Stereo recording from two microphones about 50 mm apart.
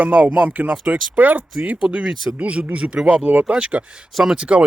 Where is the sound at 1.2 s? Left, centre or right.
Right.